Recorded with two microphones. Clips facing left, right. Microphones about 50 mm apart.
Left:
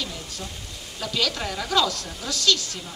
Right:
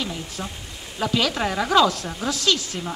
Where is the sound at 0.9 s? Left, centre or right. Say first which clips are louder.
Right 5 dB; right.